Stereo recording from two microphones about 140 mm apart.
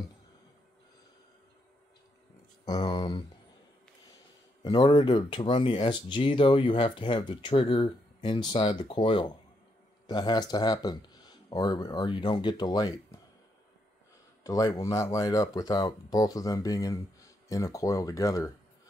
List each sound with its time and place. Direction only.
2.6 s speech: 30° left (ahead or behind)
4.6 s speech: 35° left (ahead or behind)
14.4 s speech: 25° left (ahead or behind)